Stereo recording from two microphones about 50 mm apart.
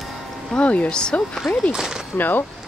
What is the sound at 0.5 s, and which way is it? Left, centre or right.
Speech, left.